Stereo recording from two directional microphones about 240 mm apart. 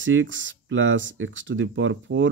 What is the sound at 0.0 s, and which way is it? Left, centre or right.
Speech, right.